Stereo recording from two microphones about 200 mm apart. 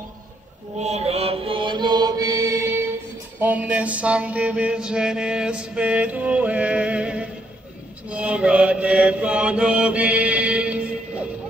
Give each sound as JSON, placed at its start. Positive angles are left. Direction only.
{"t": 0.7, "sound": "chant", "side_deg": -35}
{"t": 3.3, "sound": "mantra", "side_deg": -10}